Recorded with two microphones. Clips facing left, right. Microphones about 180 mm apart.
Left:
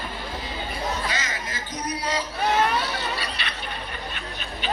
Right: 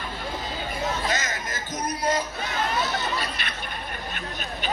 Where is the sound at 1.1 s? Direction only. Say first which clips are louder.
Right 2 dB; 45° right (ahead or behind).